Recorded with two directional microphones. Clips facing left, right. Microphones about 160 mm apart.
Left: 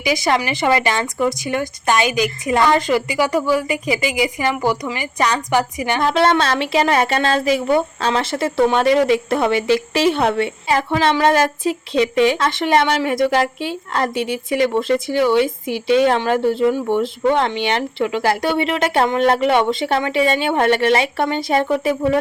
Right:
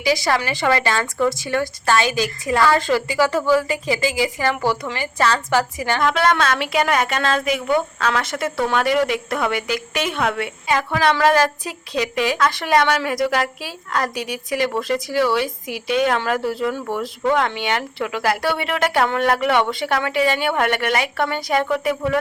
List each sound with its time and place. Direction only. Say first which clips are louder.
0.0 s speech: left 1 dB; 20° left (ahead or behind)
6.0 s speech: left 3 dB; 30° left (ahead or behind)